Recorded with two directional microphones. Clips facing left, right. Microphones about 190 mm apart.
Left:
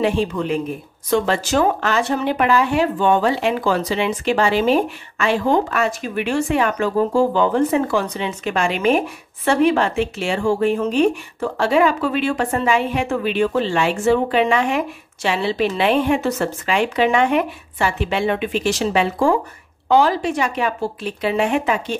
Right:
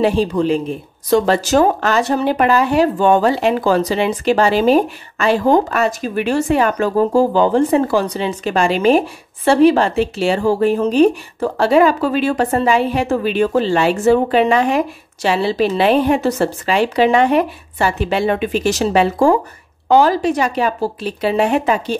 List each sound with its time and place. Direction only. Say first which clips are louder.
0.0 s speech: right 4 dB; 35° right (ahead or behind)